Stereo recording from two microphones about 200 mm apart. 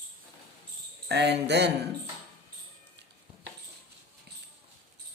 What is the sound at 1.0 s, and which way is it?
Speech, 55° right (ahead or behind).